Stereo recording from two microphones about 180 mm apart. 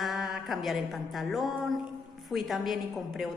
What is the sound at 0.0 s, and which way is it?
Music, centre (ahead or behind).